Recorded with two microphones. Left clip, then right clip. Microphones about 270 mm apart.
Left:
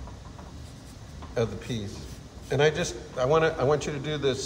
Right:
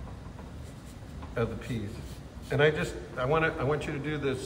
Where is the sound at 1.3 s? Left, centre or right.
Centre.